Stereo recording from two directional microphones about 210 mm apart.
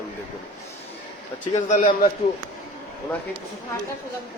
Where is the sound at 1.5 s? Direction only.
35° left (ahead or behind).